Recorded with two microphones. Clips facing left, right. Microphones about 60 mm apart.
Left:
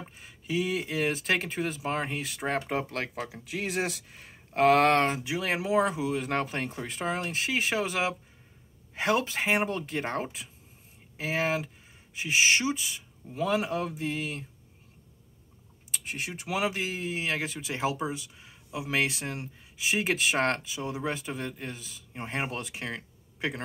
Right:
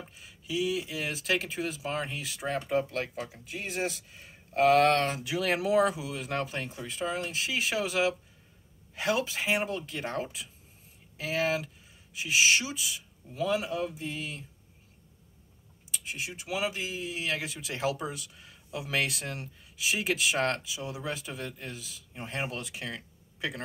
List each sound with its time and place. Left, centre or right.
0.1 s speech: left
3.3 s speech: left
5.2 s speech: left
15.9 s speech: left
17.1 s speech: left